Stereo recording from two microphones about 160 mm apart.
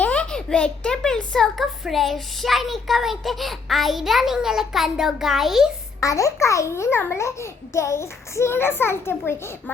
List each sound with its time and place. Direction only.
0.0 s a child's voice: 10° left (ahead or behind)
6.0 s a child's voice: 20° left (ahead or behind)